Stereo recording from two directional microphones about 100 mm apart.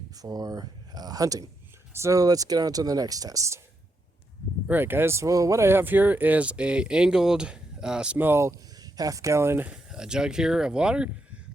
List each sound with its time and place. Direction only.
0.2 s speech: 40° right (ahead or behind)
4.7 s speech: 20° right (ahead or behind)
8.8 s speech: 35° right (ahead or behind)
9.6 s speech: 5° right (ahead or behind)